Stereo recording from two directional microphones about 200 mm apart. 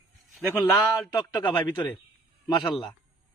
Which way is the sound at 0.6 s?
20° left (ahead or behind).